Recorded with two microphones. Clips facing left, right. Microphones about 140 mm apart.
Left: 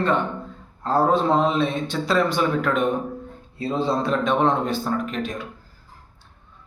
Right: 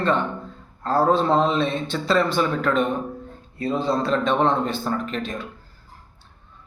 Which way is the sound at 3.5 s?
25° left (ahead or behind).